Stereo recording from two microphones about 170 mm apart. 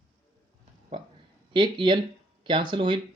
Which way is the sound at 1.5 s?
30° right (ahead or behind).